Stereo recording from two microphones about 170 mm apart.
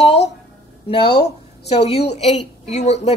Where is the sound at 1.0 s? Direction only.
70° left (ahead or behind).